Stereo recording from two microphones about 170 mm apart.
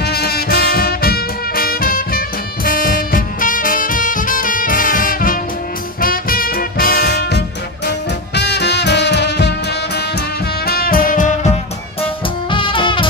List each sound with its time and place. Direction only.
0.0 s music: 65° left (ahead or behind); by 11.5 s 50° left (ahead or behind)
12.0 s music: 30° left (ahead or behind)